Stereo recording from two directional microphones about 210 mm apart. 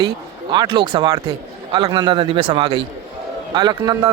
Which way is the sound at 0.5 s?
20° right (ahead or behind).